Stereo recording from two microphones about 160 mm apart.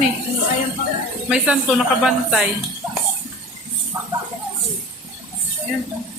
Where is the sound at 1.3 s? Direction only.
5° right (ahead or behind).